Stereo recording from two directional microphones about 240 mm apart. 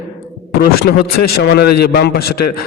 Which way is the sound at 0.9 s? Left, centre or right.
Left.